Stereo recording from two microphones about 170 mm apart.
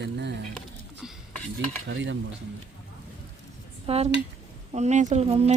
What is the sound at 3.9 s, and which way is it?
Speech, 40° right (ahead or behind).